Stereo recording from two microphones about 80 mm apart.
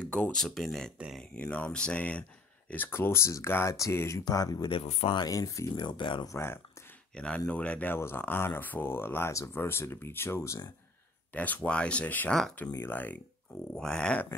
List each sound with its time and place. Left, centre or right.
0.0 s speech: centre
1.3 s speech: centre
2.7 s speech: left
4.2 s speech: left
4.6 s speech: left
5.3 s speech: left
5.8 s speech: left
6.2 s speech: left
7.2 s speech: centre
7.9 s speech: left
11.3 s speech: centre
13.7 s speech: centre